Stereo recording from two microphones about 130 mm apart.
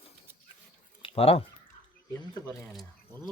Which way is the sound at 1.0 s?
45° left (ahead or behind).